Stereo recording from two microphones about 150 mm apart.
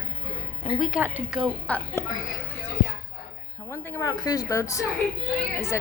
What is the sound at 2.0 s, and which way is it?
Speech, 15° left (ahead or behind).